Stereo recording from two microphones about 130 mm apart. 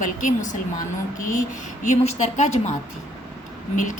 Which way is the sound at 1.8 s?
65° left (ahead or behind).